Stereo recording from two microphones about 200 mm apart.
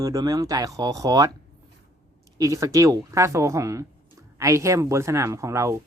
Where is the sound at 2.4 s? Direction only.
15° right (ahead or behind).